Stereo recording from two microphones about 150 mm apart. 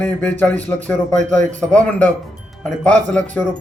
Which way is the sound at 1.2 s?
55° right (ahead or behind).